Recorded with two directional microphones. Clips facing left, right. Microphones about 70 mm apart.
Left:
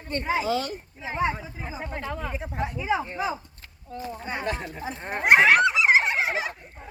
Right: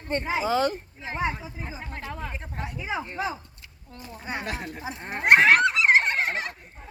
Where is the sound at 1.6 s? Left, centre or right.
Centre.